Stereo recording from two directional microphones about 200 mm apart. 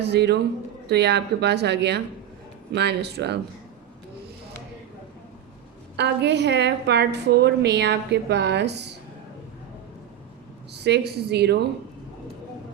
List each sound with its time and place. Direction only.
0.0 s a woman's voice: 55° right (ahead or behind)
6.0 s a woman's voice: 60° right (ahead or behind)
10.8 s a woman's voice: 55° right (ahead or behind)